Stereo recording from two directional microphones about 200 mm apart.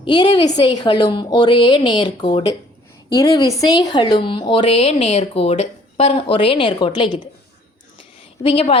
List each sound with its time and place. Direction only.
0.0 s a woman's voice: 20° left (ahead or behind)
8.4 s a woman's voice: 30° left (ahead or behind)